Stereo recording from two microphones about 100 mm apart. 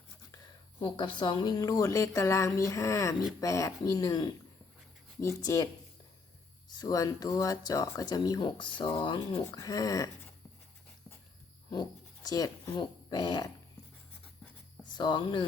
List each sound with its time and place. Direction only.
0.8 s speech: 55° left (ahead or behind); by 4.3 s 40° left (ahead or behind)
5.4 s speech: 35° left (ahead or behind)
6.7 s speech: 35° left (ahead or behind); by 9.4 s 60° left (ahead or behind)
9.5 s speech: 35° left (ahead or behind)
11.7 s speech: 40° left (ahead or behind)
14.9 s speech: 50° left (ahead or behind)